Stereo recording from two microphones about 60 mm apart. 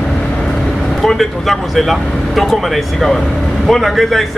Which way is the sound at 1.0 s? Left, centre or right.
Centre.